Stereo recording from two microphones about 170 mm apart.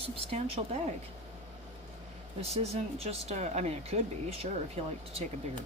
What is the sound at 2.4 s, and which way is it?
Speech, 35° right (ahead or behind).